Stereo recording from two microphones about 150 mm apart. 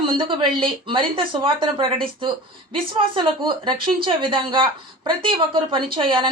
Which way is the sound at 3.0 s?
35° right (ahead or behind).